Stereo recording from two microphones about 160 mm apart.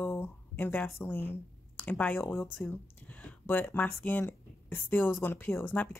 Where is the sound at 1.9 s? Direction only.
10° left (ahead or behind).